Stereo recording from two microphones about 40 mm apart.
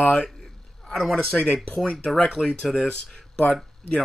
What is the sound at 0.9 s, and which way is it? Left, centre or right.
Speech, centre.